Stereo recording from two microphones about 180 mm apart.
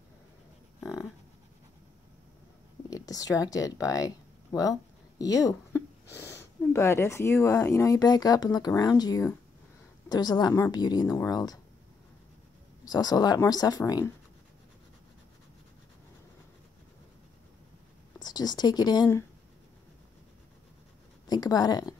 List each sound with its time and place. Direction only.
2.9 s speech: 20° left (ahead or behind)
12.8 s speech: 20° left (ahead or behind)
18.2 s speech: 20° left (ahead or behind)
21.3 s speech: 20° left (ahead or behind)